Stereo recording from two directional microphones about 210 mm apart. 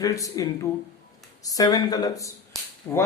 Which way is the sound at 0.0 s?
15° left (ahead or behind).